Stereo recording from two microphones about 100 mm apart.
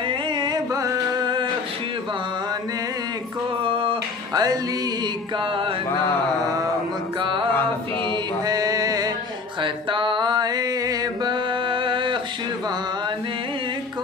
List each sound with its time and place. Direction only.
0.4 s music: 40° right (ahead or behind)
3.6 s a sound: 60° right (ahead or behind)
4.3 s music: 40° right (ahead or behind)
7.2 s music: 55° right (ahead or behind)
8.5 s mantra: 35° right (ahead or behind)
9.6 s music: 55° right (ahead or behind); by 11.3 s 40° right (ahead or behind)
11.7 s a sound: 55° right (ahead or behind)